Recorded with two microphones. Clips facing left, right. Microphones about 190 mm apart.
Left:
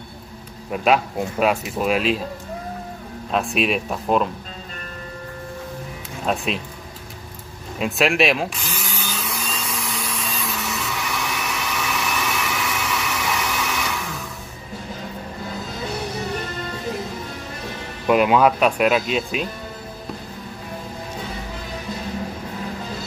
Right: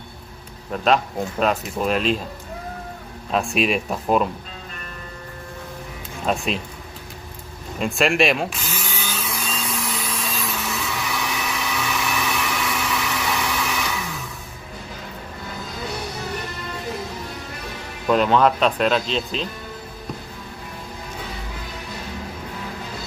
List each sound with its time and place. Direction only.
0.7 s speech: 10° left (ahead or behind)
3.3 s speech: centre (ahead or behind)
6.2 s speech: centre (ahead or behind)
7.8 s a sound: centre (ahead or behind)
18.0 s speech: 10° left (ahead or behind)